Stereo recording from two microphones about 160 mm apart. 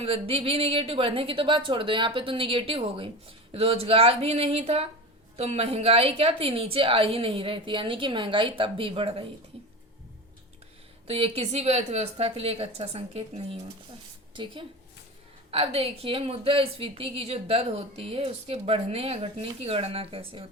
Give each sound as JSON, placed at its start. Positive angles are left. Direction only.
{"t": 0.0, "sound": "speech", "side_deg": -35}
{"t": 11.0, "sound": "a woman's voice", "side_deg": -40}